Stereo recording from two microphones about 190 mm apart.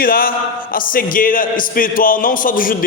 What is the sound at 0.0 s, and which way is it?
A man's voice, 50° left (ahead or behind).